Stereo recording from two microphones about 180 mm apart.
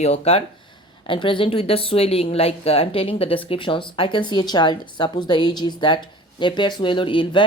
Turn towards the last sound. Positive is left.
turn(degrees=30)  # may be behind; listen again after turning